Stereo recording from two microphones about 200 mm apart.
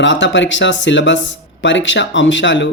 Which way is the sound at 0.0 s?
65° left (ahead or behind).